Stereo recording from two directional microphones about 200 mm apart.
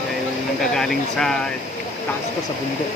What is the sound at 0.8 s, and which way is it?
Speech, centre (ahead or behind).